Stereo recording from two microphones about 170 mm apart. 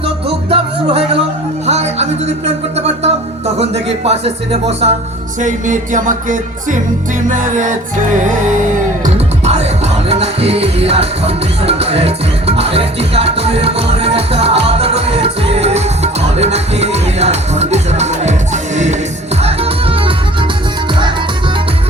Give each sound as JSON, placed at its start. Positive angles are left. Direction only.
{"t": 0.0, "sound": "music", "side_deg": -35}
{"t": 2.7, "sound": "speech", "side_deg": -40}
{"t": 5.4, "sound": "music", "side_deg": -45}